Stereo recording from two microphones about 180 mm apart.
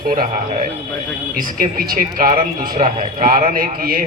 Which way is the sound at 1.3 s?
50° right (ahead or behind).